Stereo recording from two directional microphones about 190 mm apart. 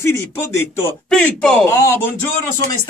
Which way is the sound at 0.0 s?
15° left (ahead or behind).